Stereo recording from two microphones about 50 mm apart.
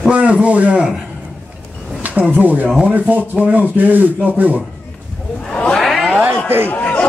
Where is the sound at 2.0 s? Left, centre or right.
Right.